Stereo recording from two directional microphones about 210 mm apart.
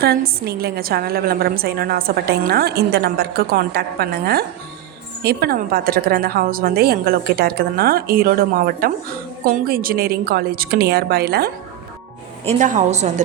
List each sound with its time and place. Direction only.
0.0 s a woman's voice: 45° right (ahead or behind)
12.5 s a woman's voice: 35° right (ahead or behind)